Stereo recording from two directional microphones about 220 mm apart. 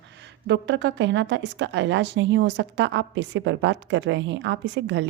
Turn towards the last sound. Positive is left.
turn(degrees=-55)  # may be behind; listen again after turning